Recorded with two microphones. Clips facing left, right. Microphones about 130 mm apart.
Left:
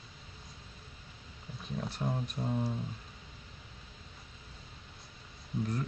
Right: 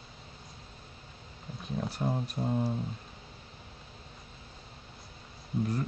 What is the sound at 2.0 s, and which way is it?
Speech, 20° right (ahead or behind).